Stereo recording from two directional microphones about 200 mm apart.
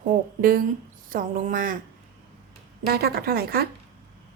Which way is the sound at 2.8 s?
50° right (ahead or behind).